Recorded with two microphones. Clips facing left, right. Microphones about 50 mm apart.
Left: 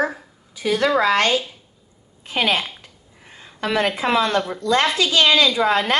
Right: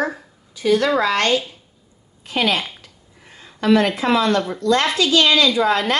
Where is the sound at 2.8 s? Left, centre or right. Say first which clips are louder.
Even; left.